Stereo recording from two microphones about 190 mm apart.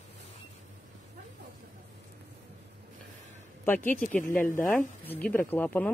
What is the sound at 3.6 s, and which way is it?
Speech, 10° left (ahead or behind).